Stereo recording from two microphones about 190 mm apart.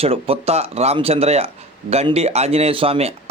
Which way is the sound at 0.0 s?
30° right (ahead or behind).